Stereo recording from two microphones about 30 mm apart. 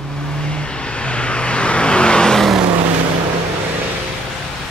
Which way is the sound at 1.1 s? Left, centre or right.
Left.